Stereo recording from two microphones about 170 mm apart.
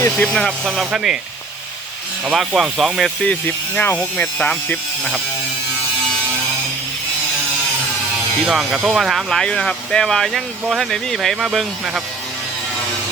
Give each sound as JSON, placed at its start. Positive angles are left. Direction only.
{"t": 0.0, "sound": "speech", "side_deg": 5}
{"t": 2.2, "sound": "speech", "side_deg": -5}
{"t": 8.4, "sound": "speech", "side_deg": 0}